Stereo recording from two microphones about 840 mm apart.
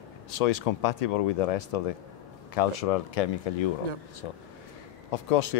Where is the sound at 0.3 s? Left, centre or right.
Left.